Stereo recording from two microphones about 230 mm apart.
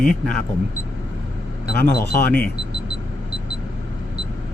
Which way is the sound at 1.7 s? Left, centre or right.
Left.